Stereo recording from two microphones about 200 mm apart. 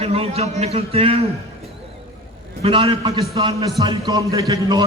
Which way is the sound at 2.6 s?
25° right (ahead or behind).